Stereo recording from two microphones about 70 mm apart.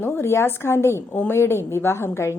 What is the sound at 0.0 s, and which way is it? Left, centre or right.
A woman's voice, left.